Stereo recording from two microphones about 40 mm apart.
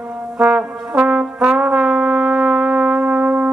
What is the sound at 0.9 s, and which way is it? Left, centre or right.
Brass instrument, right.